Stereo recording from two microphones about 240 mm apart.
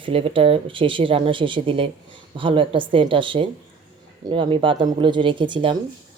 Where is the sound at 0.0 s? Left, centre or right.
Right.